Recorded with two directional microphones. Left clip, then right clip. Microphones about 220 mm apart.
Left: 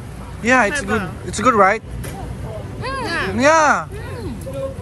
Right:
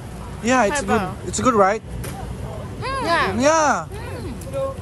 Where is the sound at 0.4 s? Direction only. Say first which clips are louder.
Left 3 dB; 15° right (ahead or behind).